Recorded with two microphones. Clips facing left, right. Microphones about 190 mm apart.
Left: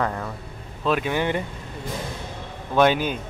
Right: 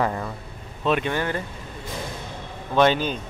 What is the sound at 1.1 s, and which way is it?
Speech, 20° left (ahead or behind).